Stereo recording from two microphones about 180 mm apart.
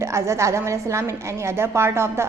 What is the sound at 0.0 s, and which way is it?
A woman's voice, 15° right (ahead or behind).